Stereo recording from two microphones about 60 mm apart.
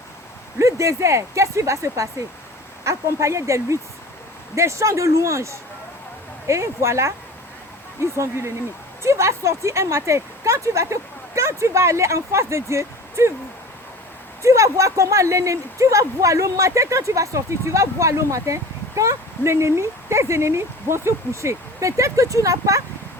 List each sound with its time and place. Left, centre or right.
0.6 s speech: right
14.4 s speech: right